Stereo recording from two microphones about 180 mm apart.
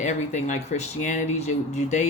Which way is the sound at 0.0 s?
40° left (ahead or behind).